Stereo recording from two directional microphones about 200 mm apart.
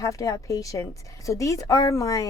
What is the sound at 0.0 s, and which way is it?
A woman's voice, 15° left (ahead or behind).